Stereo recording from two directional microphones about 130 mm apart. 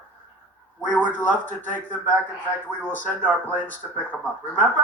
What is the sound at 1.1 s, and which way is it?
Speech, 15° left (ahead or behind).